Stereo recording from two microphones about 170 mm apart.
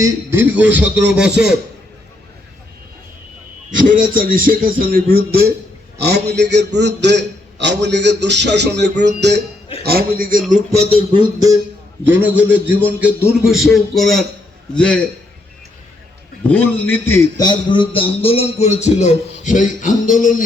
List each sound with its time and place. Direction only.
0.0 s a man's voice: 15° right (ahead or behind)
3.7 s a man's voice: 50° right (ahead or behind)
6.0 s a man's voice: 75° right (ahead or behind)
9.8 s speech: 65° right (ahead or behind)
10.5 s a sound: 40° right (ahead or behind)
12.0 s a man's voice: 10° right (ahead or behind); by 14.9 s 5° left (ahead or behind)
16.5 s a man's voice: 10° left (ahead or behind); by 20.1 s 50° left (ahead or behind)